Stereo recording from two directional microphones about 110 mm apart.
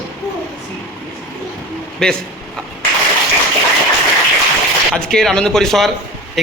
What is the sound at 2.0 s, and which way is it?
Speech, 5° left (ahead or behind).